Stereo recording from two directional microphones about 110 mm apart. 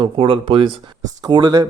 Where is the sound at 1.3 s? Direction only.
40° right (ahead or behind).